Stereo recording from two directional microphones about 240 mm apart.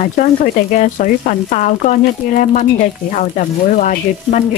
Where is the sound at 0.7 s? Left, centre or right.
Left.